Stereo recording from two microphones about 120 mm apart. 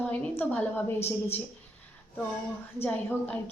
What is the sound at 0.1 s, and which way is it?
A woman's voice, 15° left (ahead or behind).